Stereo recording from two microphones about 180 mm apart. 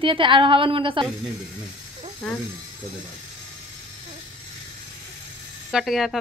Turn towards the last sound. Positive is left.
turn(degrees=0)  # may be behind; listen again after turning